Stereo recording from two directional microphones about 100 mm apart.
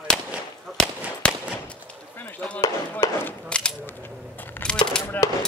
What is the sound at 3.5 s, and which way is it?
Speech, 10° left (ahead or behind).